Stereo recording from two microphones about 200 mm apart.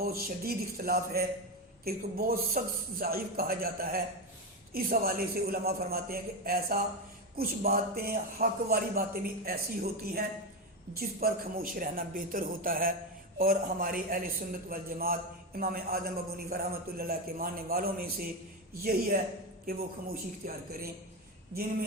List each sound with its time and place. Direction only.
0.0 s a man's voice: 50° right (ahead or behind)